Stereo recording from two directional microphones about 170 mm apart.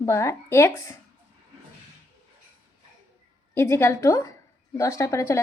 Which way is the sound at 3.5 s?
15° left (ahead or behind).